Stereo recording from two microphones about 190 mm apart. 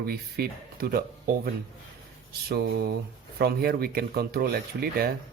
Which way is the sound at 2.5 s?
55° right (ahead or behind).